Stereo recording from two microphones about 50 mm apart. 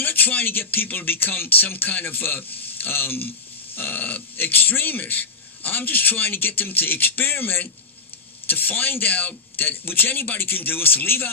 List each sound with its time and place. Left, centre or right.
0.0 s speech: left